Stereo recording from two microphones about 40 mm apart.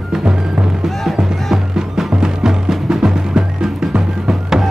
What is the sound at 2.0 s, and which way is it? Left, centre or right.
Music, centre.